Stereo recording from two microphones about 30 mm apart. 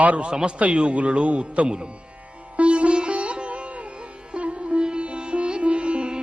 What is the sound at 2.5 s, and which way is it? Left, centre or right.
Sitar, right.